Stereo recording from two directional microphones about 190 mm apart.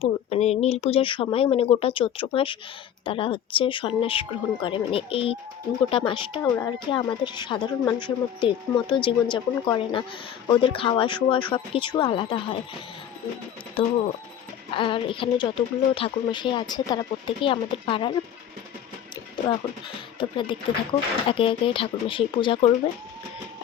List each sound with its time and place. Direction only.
0.0 s speech: 35° left (ahead or behind)
6.4 s speech: 15° left (ahead or behind)
13.8 s speech: 25° left (ahead or behind)
19.4 s speech: 20° left (ahead or behind)